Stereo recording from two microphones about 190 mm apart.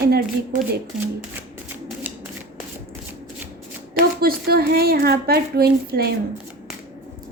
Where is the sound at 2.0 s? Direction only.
10° right (ahead or behind).